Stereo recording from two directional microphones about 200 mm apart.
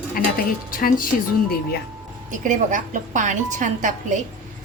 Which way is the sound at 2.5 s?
40° right (ahead or behind).